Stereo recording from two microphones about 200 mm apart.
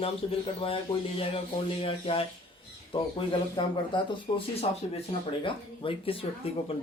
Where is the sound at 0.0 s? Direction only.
30° left (ahead or behind).